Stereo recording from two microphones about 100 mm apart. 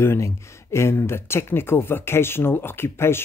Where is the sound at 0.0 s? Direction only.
25° left (ahead or behind).